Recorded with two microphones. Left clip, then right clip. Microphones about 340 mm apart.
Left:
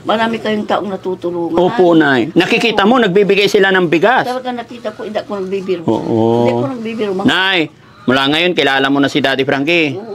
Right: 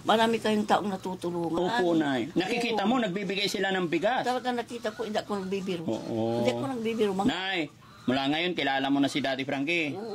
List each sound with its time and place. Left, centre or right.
0.1 s speech: right
1.5 s speech: centre
5.1 s speech: right
5.9 s speech: left
7.2 s speech: centre